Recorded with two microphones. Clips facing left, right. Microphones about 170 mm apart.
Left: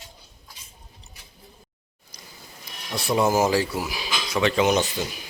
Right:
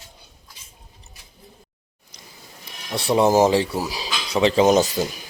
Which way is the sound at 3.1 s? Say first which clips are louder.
Right 4 dB; 35° right (ahead or behind).